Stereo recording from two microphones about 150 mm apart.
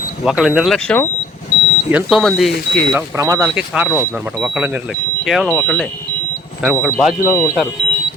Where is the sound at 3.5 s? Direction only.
10° right (ahead or behind).